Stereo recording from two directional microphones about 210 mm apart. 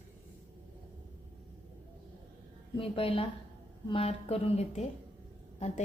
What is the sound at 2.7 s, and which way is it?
A woman's voice, 25° left (ahead or behind).